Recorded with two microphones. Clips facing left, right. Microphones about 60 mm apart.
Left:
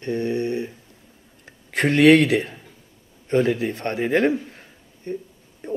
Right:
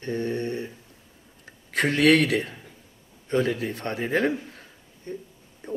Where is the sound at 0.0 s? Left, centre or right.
Left.